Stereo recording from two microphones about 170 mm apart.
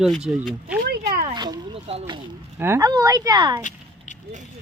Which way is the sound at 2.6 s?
15° right (ahead or behind).